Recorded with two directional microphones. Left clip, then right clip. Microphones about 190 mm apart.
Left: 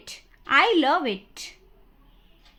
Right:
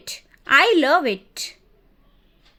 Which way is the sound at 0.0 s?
15° right (ahead or behind).